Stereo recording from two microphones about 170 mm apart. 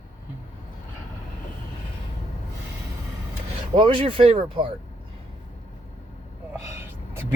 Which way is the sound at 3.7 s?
30° right (ahead or behind).